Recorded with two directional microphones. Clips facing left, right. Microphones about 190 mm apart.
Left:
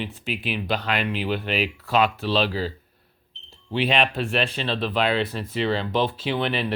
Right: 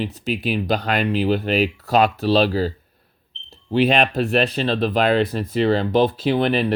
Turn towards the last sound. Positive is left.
turn(degrees=-40)  # may be behind; listen again after turning